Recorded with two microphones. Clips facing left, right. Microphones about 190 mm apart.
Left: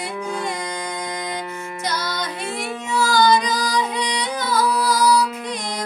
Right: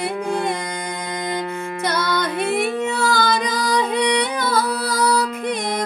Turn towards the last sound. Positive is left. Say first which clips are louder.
# right 5 dB
turn(degrees=-60)  # may be behind; listen again after turning